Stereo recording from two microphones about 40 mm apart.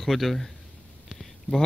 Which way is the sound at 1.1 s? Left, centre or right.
Centre.